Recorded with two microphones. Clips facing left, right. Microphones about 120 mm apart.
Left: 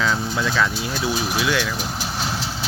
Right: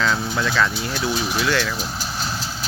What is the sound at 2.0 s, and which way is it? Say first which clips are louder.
Vehicle: left 2 dB; 70° left (ahead or behind).